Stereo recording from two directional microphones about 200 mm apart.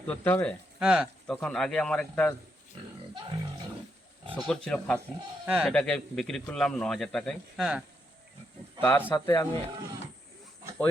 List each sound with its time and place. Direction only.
0.1 s speech: 5° left (ahead or behind)
0.8 s a man's voice: 5° right (ahead or behind)
4.4 s a man's voice: 5° left (ahead or behind)
8.8 s speech: 10° left (ahead or behind)